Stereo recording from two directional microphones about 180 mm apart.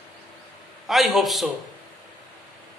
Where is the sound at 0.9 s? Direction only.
Centre (ahead or behind).